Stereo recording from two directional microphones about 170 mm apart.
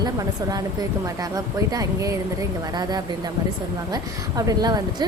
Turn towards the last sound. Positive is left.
turn(degrees=-25)  # may be behind; listen again after turning